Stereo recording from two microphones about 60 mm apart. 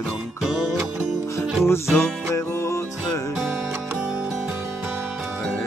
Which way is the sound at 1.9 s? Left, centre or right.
Left.